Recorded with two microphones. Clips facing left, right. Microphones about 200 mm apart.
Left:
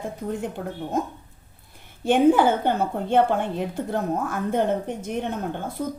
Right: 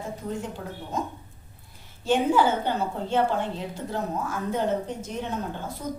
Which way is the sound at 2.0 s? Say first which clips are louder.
Left 5 dB; 55° left (ahead or behind).